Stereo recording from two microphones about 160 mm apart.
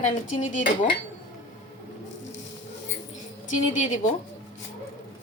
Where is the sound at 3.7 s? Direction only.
50° left (ahead or behind).